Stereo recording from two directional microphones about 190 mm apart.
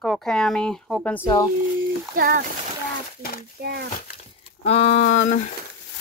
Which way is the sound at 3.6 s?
60° right (ahead or behind).